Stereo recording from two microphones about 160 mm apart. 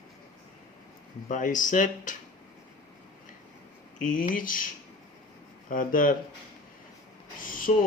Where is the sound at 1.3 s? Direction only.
55° left (ahead or behind).